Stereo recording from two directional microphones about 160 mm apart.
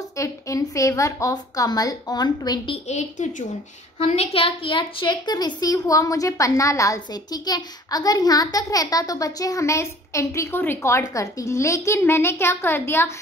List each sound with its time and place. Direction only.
0.2 s a woman's voice: 20° left (ahead or behind)
2.9 s a woman's voice: 45° left (ahead or behind); by 13.1 s 15° left (ahead or behind)